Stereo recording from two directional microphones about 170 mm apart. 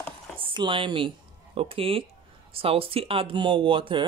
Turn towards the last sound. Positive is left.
turn(degrees=-30)  # may be behind; listen again after turning